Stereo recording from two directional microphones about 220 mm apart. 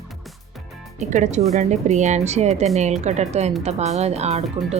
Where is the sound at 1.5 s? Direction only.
30° right (ahead or behind).